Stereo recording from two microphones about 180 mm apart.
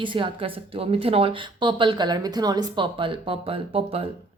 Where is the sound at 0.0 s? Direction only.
30° right (ahead or behind).